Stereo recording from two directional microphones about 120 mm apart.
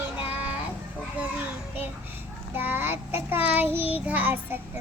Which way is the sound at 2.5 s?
15° right (ahead or behind).